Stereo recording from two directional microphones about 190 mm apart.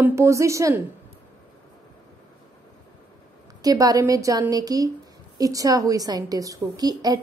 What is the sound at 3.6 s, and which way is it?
A woman's voice, 20° right (ahead or behind).